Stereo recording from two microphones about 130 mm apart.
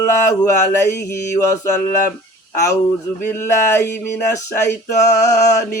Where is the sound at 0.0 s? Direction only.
25° left (ahead or behind).